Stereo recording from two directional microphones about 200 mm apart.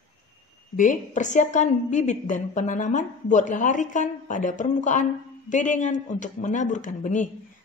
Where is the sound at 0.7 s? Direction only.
40° left (ahead or behind).